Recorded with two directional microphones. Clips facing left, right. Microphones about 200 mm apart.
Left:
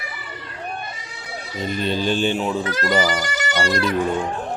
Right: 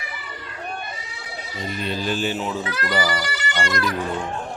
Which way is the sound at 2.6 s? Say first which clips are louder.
Left 4 dB; 45° left (ahead or behind).